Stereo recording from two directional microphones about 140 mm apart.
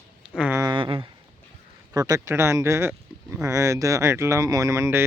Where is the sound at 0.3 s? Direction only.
10° right (ahead or behind).